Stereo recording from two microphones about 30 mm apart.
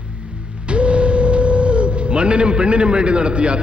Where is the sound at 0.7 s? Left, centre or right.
Right.